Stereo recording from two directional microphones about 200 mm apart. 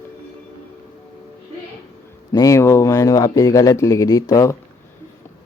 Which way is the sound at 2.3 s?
15° left (ahead or behind).